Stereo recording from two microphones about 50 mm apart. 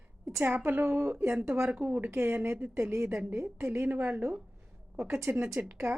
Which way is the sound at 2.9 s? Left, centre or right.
Right.